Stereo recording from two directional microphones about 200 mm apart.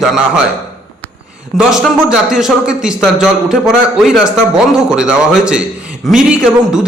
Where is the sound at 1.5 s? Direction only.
5° right (ahead or behind).